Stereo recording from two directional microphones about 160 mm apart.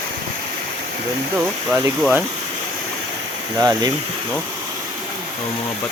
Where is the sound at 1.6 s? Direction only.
10° right (ahead or behind).